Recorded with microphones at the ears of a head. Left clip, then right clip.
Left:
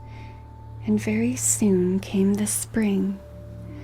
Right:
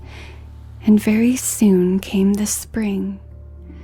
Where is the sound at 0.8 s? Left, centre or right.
Right.